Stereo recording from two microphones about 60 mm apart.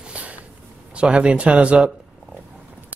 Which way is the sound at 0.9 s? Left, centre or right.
Centre.